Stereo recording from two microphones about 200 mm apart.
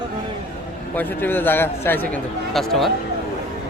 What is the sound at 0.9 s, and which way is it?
A man's voice, 10° left (ahead or behind).